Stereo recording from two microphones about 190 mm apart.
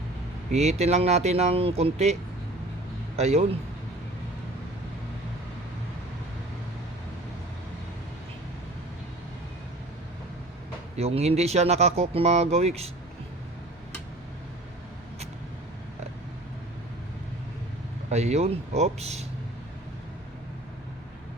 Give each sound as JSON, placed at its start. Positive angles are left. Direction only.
{"t": 0.5, "sound": "speech", "side_deg": -35}
{"t": 3.2, "sound": "speech", "side_deg": -35}
{"t": 10.9, "sound": "speech", "side_deg": -35}
{"t": 18.1, "sound": "speech", "side_deg": -35}